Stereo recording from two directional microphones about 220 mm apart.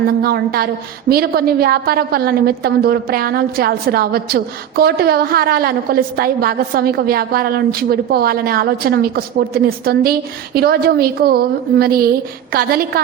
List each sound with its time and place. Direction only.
0.2 s a woman's voice: 45° right (ahead or behind)